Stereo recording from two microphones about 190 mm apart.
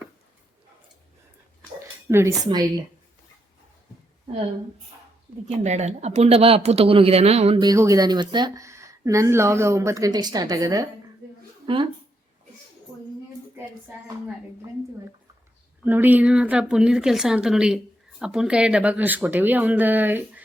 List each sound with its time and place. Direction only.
2.0 s speech: 15° right (ahead or behind)
5.6 s speech: 35° right (ahead or behind)
15.8 s a woman's voice: 10° right (ahead or behind)